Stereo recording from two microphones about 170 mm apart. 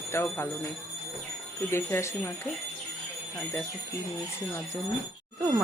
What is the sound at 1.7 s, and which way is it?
Speech, 15° left (ahead or behind).